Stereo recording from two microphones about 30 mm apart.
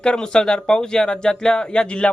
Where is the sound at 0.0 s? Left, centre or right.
Left.